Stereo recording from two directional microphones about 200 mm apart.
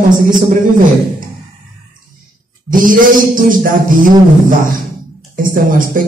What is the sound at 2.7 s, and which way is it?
A man's voice, 45° right (ahead or behind).